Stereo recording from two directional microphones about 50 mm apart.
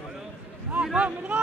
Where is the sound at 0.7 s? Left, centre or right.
Right.